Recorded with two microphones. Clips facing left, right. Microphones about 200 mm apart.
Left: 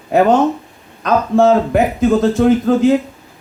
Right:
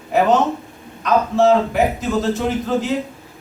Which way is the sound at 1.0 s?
55° left (ahead or behind).